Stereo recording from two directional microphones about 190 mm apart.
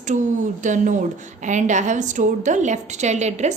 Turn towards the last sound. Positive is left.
turn(degrees=-40)  # may be behind; listen again after turning